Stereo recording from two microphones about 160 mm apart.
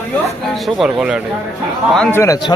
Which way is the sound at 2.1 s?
15° left (ahead or behind).